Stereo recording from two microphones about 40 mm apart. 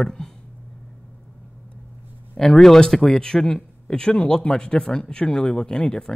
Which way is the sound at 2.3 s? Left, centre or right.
Centre.